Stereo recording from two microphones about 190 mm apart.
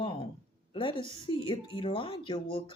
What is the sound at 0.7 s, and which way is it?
Speech, 25° left (ahead or behind).